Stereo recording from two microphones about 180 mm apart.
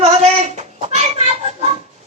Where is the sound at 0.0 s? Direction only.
35° right (ahead or behind).